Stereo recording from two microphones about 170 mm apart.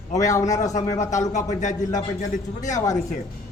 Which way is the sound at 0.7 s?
45° left (ahead or behind).